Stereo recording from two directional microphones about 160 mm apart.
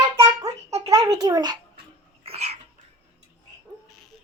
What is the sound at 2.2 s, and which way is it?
Dog, 40° right (ahead or behind).